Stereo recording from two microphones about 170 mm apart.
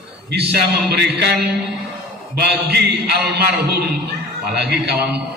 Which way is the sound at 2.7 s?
75° right (ahead or behind).